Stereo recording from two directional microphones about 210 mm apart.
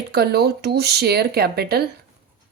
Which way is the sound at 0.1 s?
50° right (ahead or behind).